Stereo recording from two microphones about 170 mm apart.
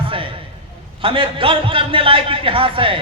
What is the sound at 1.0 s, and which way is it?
A man's voice, 30° right (ahead or behind).